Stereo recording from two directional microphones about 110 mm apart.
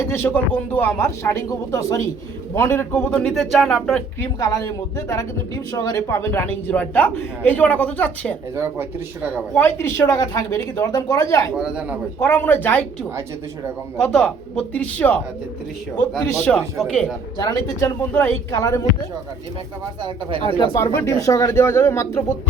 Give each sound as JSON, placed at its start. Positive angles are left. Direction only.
{"t": 0.1, "sound": "speech", "side_deg": 20}
{"t": 3.1, "sound": "speech", "side_deg": 5}
{"t": 4.2, "sound": "speech", "side_deg": 30}
{"t": 8.5, "sound": "speech", "side_deg": -25}
{"t": 9.6, "sound": "speech", "side_deg": 20}
{"t": 10.0, "sound": "a woman's voice", "side_deg": 35}
{"t": 11.5, "sound": "speech", "side_deg": -5}
{"t": 12.2, "sound": "speech", "side_deg": 20}
{"t": 14.0, "sound": "speech", "side_deg": 5}
{"t": 17.3, "sound": "a woman's voice", "side_deg": 40}
{"t": 17.8, "sound": "speech", "side_deg": 20}
{"t": 18.5, "sound": "a woman's voice", "side_deg": 35}
{"t": 20.0, "sound": "speech", "side_deg": -45}
{"t": 20.7, "sound": "speech", "side_deg": 25}